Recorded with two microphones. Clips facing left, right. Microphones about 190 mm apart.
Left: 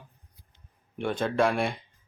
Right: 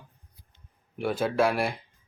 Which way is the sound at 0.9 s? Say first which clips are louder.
Right 1 dB; 5° right (ahead or behind).